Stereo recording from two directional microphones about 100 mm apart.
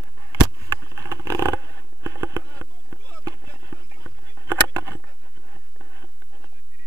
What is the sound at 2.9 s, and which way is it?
Rowboat, 35° right (ahead or behind).